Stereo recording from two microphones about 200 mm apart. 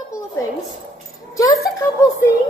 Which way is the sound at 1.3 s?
15° left (ahead or behind).